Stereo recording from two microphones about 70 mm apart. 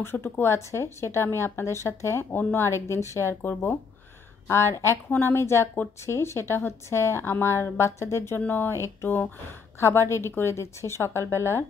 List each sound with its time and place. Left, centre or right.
0.0 s a woman's voice: left
4.5 s a woman's voice: left
8.4 s a woman's voice: left